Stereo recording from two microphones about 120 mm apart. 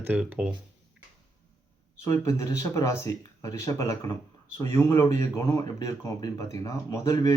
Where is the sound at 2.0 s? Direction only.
25° left (ahead or behind).